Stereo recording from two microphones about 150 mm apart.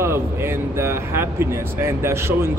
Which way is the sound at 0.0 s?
15° right (ahead or behind).